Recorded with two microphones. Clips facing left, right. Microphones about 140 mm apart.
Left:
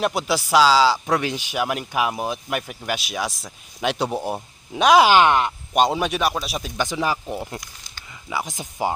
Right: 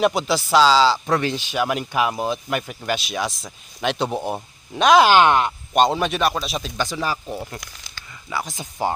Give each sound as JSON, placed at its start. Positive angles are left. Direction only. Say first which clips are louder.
{"t": 0.0, "sound": "speech", "louder": "right 3 dB", "side_deg": 5}
{"t": 7.6, "sound": "a sound", "louder": "right 2 dB", "side_deg": -90}
{"t": 8.3, "sound": "speech", "louder": "even", "side_deg": 15}